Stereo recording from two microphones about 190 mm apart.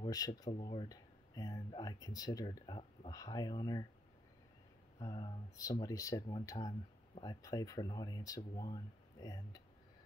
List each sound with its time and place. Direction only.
0.0 s speech: 20° left (ahead or behind)
4.9 s speech: 25° left (ahead or behind)